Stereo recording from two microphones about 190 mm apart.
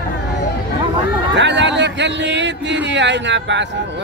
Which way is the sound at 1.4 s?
65° right (ahead or behind).